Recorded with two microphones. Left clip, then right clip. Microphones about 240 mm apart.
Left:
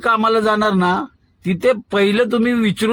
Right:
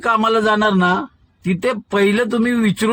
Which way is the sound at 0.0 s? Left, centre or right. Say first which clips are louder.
Even; right.